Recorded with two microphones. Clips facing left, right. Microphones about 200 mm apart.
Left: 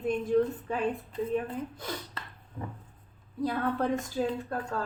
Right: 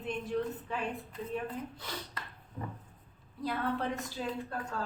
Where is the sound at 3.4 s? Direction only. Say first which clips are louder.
Left 4 dB; 50° left (ahead or behind).